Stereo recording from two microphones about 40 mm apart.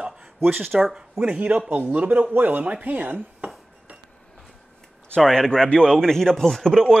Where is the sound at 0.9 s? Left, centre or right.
Centre.